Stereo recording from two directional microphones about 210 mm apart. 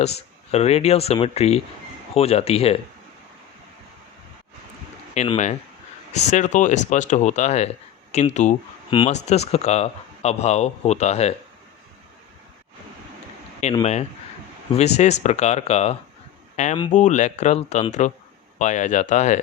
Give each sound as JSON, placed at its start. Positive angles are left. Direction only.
{"t": 0.5, "sound": "speech", "side_deg": 30}
{"t": 5.1, "sound": "speech", "side_deg": 30}
{"t": 13.6, "sound": "speech", "side_deg": 30}
{"t": 14.9, "sound": "speech", "side_deg": 35}